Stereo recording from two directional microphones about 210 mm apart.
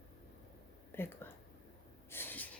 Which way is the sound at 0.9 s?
10° left (ahead or behind).